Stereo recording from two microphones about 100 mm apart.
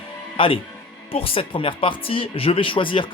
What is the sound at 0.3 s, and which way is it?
Speech, 60° left (ahead or behind).